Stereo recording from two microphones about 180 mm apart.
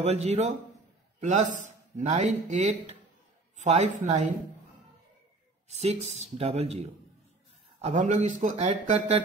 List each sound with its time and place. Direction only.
0.0 s speech: 35° right (ahead or behind)
5.7 s speech: 35° right (ahead or behind)